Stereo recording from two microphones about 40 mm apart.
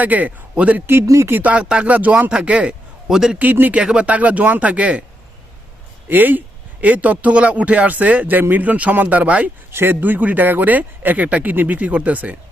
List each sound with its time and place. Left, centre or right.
0.0 s speech: right
0.9 s speech: right
1.4 s speech: right
1.6 s speech: right
1.9 s speech: right
3.1 s a man's voice: centre
3.3 s speech: right
3.9 s speech: right
6.1 s speech: right
6.8 s speech: right
9.7 s speech: right
11.3 s speech: right